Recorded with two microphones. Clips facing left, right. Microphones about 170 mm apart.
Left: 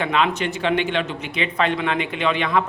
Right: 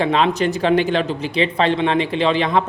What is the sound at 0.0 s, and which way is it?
Speech, 35° right (ahead or behind).